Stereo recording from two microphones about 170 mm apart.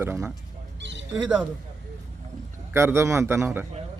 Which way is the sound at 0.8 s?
90° right.